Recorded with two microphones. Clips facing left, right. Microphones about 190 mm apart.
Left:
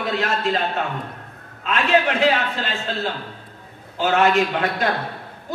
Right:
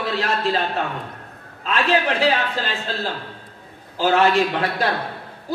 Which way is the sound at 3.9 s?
35° right (ahead or behind).